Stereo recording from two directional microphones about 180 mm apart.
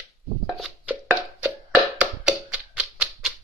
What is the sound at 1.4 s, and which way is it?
Hands, 10° right (ahead or behind).